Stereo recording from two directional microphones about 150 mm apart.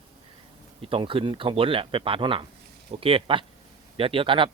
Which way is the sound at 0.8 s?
35° right (ahead or behind).